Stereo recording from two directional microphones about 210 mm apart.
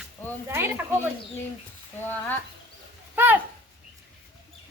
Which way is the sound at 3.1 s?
10° right (ahead or behind).